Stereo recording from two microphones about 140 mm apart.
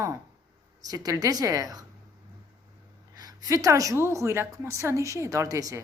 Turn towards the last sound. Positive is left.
turn(degrees=-25)  # may be behind; listen again after turning